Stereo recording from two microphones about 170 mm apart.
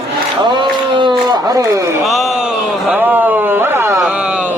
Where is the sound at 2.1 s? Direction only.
Centre (ahead or behind).